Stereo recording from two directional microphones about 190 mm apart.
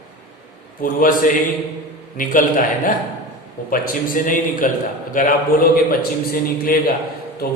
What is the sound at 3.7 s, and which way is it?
A man's voice, 50° left (ahead or behind).